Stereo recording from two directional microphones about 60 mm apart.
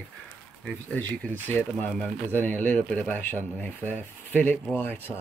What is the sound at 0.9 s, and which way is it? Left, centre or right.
Speech, left.